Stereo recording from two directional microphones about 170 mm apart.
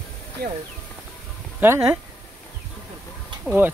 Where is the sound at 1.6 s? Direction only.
10° right (ahead or behind).